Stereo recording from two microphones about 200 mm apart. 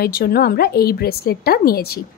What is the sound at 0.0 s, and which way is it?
A woman's voice, 50° left (ahead or behind).